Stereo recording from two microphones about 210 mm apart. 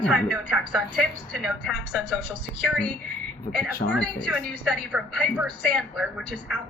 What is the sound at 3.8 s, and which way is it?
Speech, 30° left (ahead or behind).